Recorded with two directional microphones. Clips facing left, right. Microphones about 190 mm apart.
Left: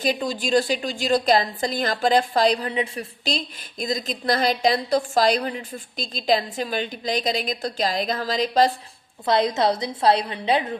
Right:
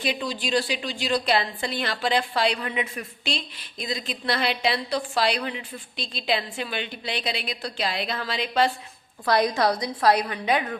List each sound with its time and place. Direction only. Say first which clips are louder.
0.0 s a woman's voice: left 4 dB; 45° left (ahead or behind)
9.2 s a woman's voice: left 1 dB; 25° left (ahead or behind)